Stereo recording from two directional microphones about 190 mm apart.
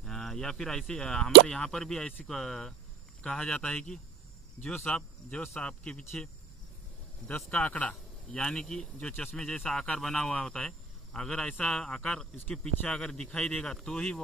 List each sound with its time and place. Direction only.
0.0 s a man's voice: centre (ahead or behind)